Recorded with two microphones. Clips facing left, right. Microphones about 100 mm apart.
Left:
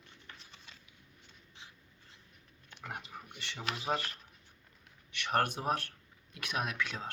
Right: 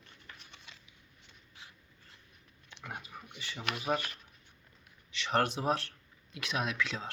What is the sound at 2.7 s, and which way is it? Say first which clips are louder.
Pig: even; 45° left (ahead or behind).